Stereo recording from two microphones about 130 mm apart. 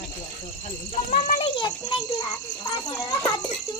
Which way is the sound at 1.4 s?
40° left (ahead or behind).